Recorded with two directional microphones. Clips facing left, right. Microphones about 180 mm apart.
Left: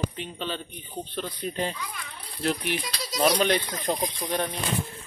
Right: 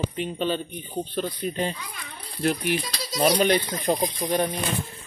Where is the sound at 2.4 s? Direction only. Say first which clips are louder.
Right 3 dB; 40° right (ahead or behind).